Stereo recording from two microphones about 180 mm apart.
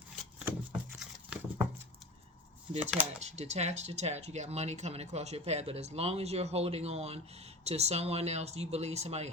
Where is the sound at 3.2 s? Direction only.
40° right (ahead or behind).